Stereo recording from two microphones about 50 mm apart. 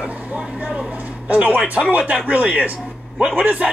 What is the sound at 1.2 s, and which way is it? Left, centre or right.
Speech, right.